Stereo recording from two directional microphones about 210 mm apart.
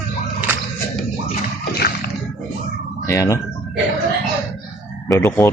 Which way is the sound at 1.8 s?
45° left (ahead or behind).